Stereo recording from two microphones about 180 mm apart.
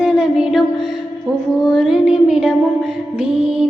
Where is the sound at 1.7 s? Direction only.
5° right (ahead or behind).